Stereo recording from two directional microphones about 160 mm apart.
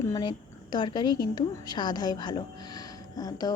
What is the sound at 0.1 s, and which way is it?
A woman's voice, 25° left (ahead or behind).